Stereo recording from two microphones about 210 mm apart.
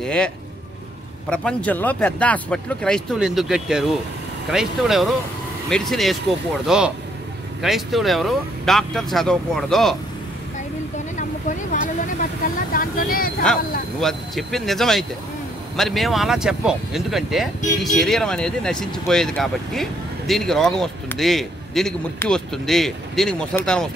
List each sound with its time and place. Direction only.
0.0 s speech: 5° left (ahead or behind)
1.3 s speech: 5° left (ahead or behind)
11.1 s vehicle: 35° left (ahead or behind)
12.7 s speech: 40° left (ahead or behind)
13.4 s speech: 5° left (ahead or behind)